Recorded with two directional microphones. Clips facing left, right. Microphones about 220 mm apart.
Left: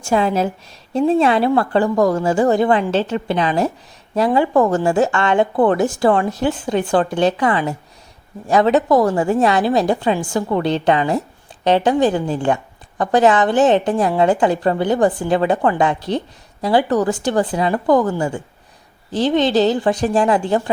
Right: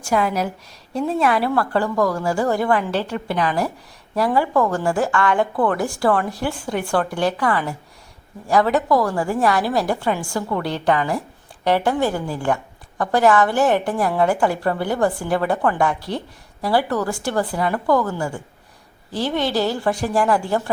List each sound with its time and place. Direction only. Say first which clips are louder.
0.0 s a woman's voice: left 4 dB; 25° left (ahead or behind)